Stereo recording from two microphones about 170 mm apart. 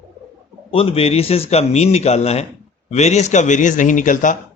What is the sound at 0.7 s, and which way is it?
A man's voice, 35° left (ahead or behind).